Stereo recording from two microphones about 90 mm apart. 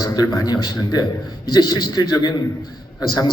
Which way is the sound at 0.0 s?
45° left (ahead or behind).